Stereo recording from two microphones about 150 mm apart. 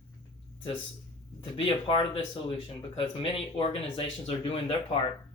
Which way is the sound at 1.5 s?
35° left (ahead or behind).